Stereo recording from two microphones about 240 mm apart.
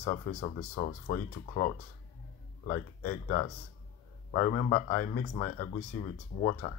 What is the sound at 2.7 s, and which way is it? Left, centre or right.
Speech, left.